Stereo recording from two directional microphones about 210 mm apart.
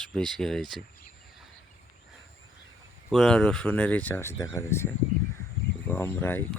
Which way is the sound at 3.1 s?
Centre (ahead or behind).